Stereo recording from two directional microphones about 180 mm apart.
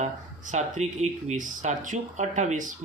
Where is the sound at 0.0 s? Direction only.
40° right (ahead or behind).